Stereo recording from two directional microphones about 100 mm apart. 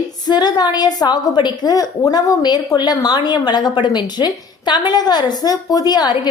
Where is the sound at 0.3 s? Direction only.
45° left (ahead or behind).